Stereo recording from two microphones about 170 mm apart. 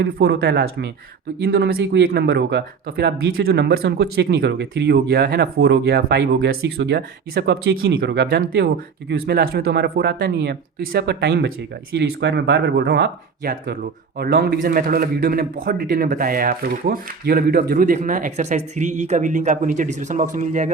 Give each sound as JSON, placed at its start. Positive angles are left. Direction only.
{"t": 0.0, "sound": "a man's voice", "side_deg": -80}